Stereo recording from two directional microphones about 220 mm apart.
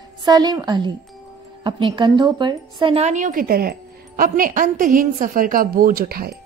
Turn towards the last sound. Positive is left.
turn(degrees=-45)  # may be behind; listen again after turning